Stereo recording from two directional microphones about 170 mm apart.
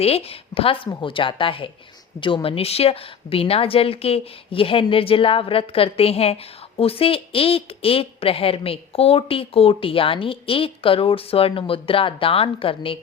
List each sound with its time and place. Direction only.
0.0 s a woman's voice: 35° left (ahead or behind)